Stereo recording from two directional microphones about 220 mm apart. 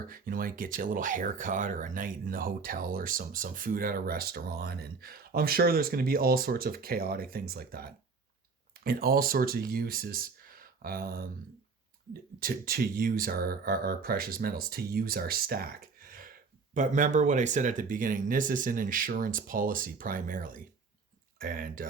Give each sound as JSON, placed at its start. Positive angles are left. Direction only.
{"t": 0.1, "sound": "speech", "side_deg": -40}
{"t": 12.4, "sound": "speech", "side_deg": -40}